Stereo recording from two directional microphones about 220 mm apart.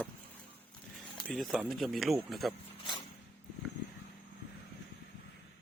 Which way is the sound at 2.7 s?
25° left (ahead or behind).